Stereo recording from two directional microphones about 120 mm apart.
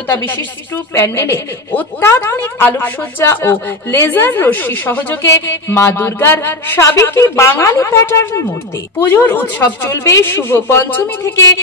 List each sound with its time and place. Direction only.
0.1 s a woman's voice: 15° left (ahead or behind)